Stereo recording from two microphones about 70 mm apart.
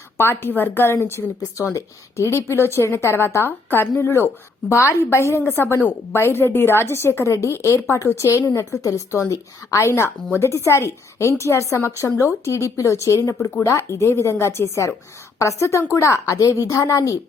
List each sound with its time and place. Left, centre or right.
0.2 s a woman's voice: left